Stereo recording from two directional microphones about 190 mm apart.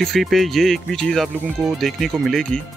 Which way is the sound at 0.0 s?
Centre (ahead or behind).